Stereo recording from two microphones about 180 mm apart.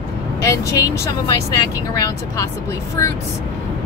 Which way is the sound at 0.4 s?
20° left (ahead or behind).